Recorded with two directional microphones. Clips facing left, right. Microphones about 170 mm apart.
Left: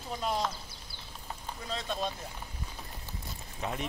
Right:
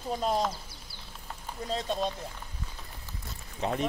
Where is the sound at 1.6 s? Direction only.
35° right (ahead or behind).